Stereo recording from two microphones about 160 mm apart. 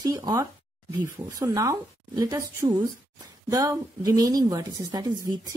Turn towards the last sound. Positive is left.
turn(degrees=-25)  # may be behind; listen again after turning